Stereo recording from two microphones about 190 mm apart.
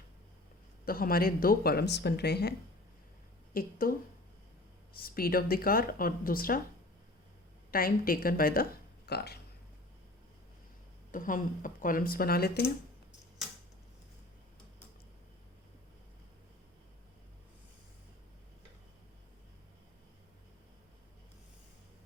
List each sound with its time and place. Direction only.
0.9 s a woman's voice: 50° left (ahead or behind)
5.0 s speech: 50° left (ahead or behind)
7.7 s speech: 50° left (ahead or behind)
11.1 s speech: 45° left (ahead or behind)